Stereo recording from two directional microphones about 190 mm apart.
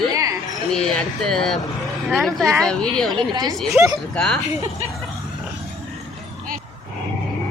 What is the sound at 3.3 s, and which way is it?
Speech, 20° right (ahead or behind).